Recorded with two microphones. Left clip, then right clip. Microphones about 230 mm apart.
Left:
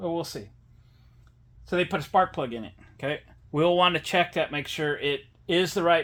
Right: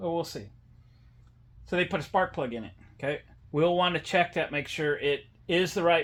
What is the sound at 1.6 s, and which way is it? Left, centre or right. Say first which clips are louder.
Speech: left 2 dB; left.